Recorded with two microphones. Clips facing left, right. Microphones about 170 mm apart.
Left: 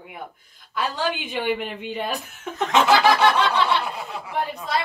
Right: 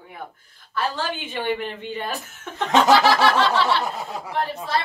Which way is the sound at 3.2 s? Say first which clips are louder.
Even; 20° left (ahead or behind).